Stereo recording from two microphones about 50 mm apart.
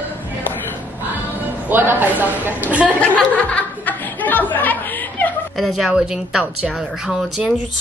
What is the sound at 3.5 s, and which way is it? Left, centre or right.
Laughter, left.